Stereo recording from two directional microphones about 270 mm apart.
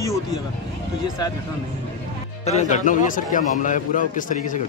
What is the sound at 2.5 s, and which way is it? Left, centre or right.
A man's voice, left.